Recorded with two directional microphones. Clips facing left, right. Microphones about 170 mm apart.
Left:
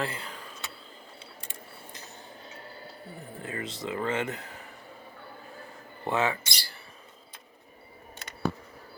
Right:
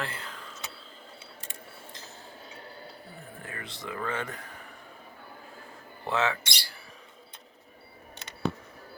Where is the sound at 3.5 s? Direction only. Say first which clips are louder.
Left 6 dB; 20° left (ahead or behind).